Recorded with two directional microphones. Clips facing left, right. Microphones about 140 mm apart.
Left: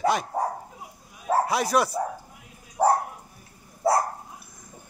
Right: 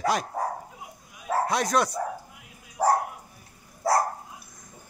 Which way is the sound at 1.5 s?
5° left (ahead or behind).